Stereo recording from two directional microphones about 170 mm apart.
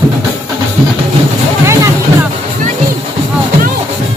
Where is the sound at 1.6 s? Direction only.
15° right (ahead or behind).